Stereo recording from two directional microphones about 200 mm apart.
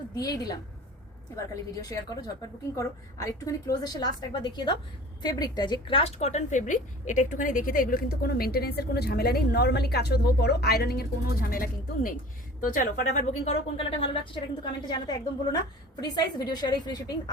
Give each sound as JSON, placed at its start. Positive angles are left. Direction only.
{"t": 0.2, "sound": "a woman's voice", "side_deg": 20}
{"t": 1.7, "sound": "a woman's voice", "side_deg": 20}